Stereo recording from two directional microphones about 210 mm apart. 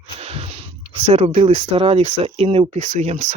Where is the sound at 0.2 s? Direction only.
30° right (ahead or behind).